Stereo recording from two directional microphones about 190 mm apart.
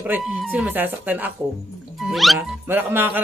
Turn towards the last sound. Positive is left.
turn(degrees=-10)  # may be behind; listen again after turning